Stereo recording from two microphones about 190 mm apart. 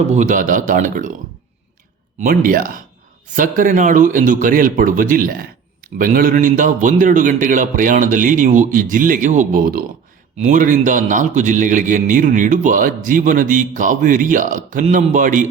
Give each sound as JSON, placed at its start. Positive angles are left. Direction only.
{"t": 0.1, "sound": "speech", "side_deg": -40}
{"t": 2.1, "sound": "speech", "side_deg": -45}